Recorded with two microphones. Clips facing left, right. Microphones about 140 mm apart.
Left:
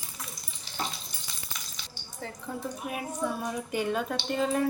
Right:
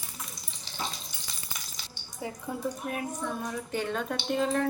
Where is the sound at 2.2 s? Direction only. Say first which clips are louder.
Right 3 dB; 10° right (ahead or behind).